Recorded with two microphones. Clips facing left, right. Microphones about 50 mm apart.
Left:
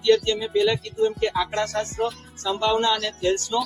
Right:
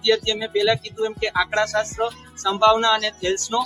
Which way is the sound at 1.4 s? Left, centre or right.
Right.